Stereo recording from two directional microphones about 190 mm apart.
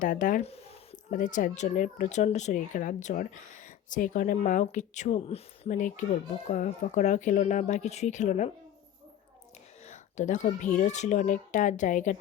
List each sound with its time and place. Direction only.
0.0 s speech: 45° left (ahead or behind)
9.8 s speech: 40° left (ahead or behind)